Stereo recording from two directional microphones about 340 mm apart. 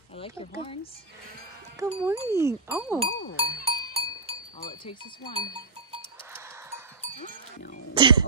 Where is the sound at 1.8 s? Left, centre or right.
Centre.